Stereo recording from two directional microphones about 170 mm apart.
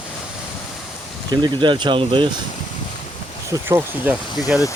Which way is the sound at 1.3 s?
25° right (ahead or behind).